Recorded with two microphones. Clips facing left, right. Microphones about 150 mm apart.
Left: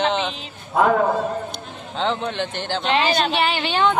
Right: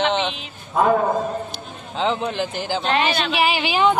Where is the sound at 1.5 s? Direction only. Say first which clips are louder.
Right 1 dB; 5° right (ahead or behind).